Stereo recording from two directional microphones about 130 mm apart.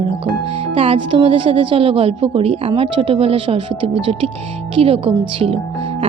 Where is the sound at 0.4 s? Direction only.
45° right (ahead or behind).